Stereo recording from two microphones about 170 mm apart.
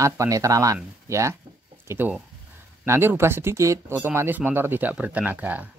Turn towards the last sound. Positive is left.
turn(degrees=-10)  # may be behind; listen again after turning